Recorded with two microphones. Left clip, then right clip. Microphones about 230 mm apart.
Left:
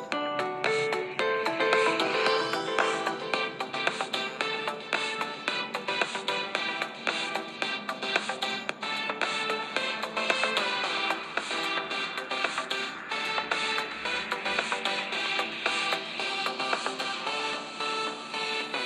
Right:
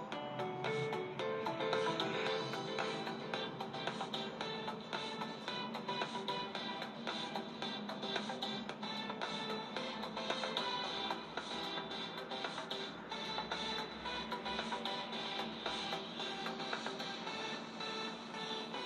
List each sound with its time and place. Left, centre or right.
0.4 s music: left
5.9 s music: left
8.1 s music: left
13.3 s music: left